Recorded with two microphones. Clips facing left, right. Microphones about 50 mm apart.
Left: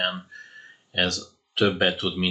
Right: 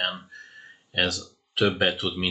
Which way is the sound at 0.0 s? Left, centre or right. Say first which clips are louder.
Left 2 dB; centre.